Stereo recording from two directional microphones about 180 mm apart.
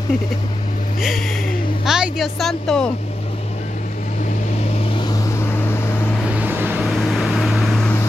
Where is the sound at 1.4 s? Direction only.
50° left (ahead or behind).